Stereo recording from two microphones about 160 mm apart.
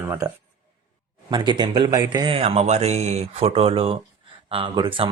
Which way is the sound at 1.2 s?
30° right (ahead or behind).